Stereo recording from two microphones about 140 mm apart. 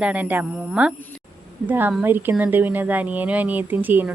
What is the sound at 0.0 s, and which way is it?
Speech, 10° right (ahead or behind).